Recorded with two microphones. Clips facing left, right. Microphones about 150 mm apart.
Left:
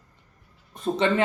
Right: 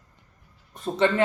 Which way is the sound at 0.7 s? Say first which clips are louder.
Even; 20° left (ahead or behind).